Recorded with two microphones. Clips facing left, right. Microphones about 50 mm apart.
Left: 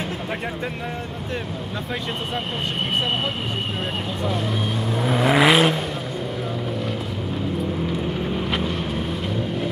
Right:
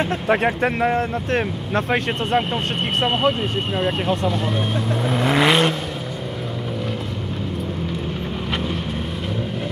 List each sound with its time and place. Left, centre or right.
0.3 s speech: right
5.0 s vehicle: centre